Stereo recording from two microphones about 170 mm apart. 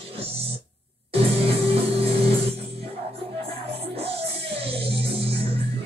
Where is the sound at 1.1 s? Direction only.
35° right (ahead or behind).